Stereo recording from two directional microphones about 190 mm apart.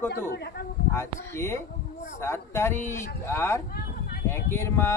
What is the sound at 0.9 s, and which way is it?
Speech, 15° left (ahead or behind).